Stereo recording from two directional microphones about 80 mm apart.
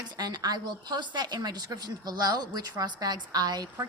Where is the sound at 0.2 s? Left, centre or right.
Right.